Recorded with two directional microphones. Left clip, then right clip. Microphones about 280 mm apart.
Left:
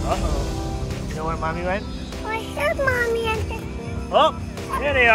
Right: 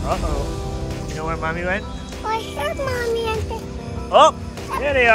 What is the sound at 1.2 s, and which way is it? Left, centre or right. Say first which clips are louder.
A child's voice: right 1 dB; centre.